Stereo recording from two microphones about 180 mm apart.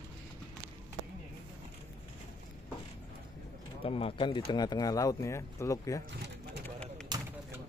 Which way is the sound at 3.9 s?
30° left (ahead or behind).